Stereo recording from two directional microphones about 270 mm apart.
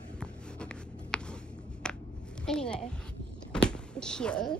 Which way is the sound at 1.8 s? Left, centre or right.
Centre.